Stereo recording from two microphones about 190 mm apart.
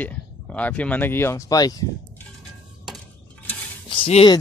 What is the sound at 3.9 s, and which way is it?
Speech, 30° left (ahead or behind).